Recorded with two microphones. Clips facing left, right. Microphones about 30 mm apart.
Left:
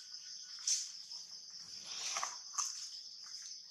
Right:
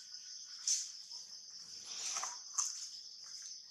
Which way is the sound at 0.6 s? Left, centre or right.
Centre.